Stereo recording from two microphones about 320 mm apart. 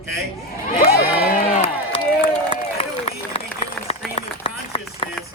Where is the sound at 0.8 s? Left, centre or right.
Left.